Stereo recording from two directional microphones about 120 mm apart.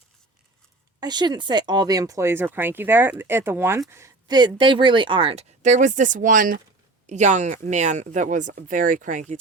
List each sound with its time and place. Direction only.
0.9 s speech: 35° right (ahead or behind)
4.3 s speech: 40° right (ahead or behind); by 9.2 s 90° right